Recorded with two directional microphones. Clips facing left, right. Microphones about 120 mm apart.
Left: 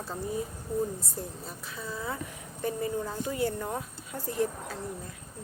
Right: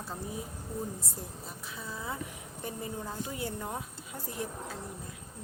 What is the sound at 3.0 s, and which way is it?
Speech, 15° right (ahead or behind).